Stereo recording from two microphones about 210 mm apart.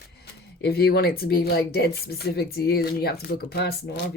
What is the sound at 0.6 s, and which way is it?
Speech, 50° left (ahead or behind).